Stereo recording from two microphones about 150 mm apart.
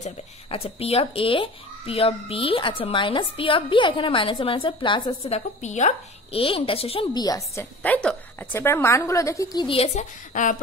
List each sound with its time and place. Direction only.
0.0 s speech: 40° left (ahead or behind)
7.2 s a woman's voice: 25° left (ahead or behind)
7.8 s a woman's voice: 10° left (ahead or behind); by 10.0 s 40° left (ahead or behind)
10.3 s a sound: 60° left (ahead or behind)